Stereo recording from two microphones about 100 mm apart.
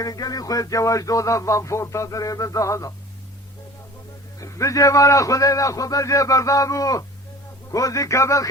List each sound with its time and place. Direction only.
0.0 s speech: 40° left (ahead or behind)
4.4 s speech: 30° left (ahead or behind)